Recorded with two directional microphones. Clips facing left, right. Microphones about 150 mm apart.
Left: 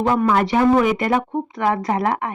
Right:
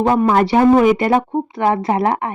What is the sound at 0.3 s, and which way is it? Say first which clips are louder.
Speech: right 4 dB; 35° right (ahead or behind).